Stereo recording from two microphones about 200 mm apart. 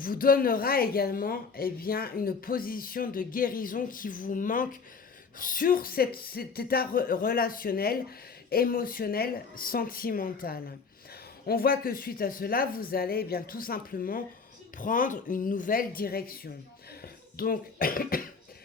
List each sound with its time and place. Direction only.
0.0 s a woman's voice: 45° left (ahead or behind)